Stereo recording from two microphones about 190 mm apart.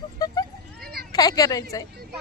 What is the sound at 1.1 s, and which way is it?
Speech, 20° left (ahead or behind).